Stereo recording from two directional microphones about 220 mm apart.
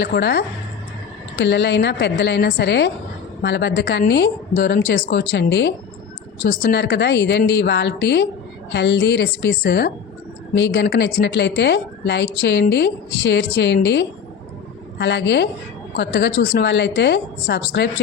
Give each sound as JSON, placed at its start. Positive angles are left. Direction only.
{"t": 0.0, "sound": "a woman's voice", "side_deg": 45}
{"t": 6.4, "sound": "a woman's voice", "side_deg": 40}